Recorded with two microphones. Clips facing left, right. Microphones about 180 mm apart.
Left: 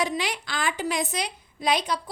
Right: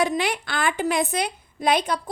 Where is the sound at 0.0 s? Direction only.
55° right (ahead or behind).